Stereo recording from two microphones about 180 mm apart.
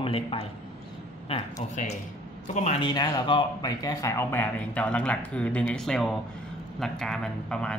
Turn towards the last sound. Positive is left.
turn(degrees=5)  # may be behind; listen again after turning